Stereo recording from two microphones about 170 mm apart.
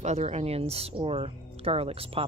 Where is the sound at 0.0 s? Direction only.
40° right (ahead or behind).